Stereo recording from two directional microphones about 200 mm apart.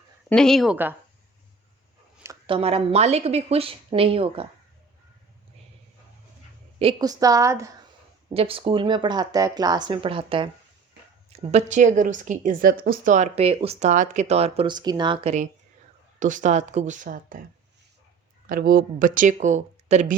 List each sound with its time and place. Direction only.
0.3 s speech: 5° left (ahead or behind)
2.5 s speech: 30° right (ahead or behind)
7.0 s a woman's voice: 15° right (ahead or behind)
8.3 s speech: 30° right (ahead or behind); by 17.4 s 45° right (ahead or behind)
18.4 s speech: 45° right (ahead or behind)